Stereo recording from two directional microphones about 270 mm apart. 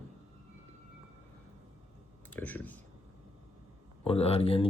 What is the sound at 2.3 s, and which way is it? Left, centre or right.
Speech, centre.